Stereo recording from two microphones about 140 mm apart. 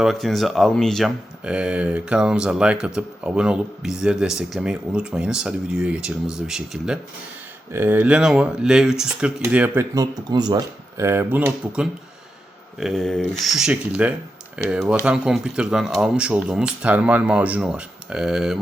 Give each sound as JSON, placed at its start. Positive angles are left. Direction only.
{"t": 0.0, "sound": "speech", "side_deg": 0}
{"t": 7.7, "sound": "speech", "side_deg": -15}
{"t": 9.9, "sound": "speech", "side_deg": -25}